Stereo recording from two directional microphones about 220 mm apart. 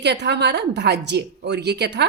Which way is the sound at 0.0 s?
50° right (ahead or behind).